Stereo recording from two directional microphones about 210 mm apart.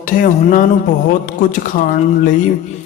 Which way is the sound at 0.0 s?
40° left (ahead or behind).